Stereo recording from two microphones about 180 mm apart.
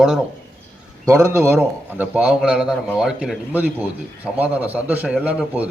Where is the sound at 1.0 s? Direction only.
15° right (ahead or behind).